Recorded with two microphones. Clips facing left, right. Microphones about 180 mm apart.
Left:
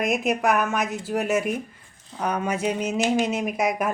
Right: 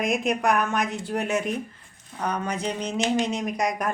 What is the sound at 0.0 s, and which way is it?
A woman's voice, 5° left (ahead or behind).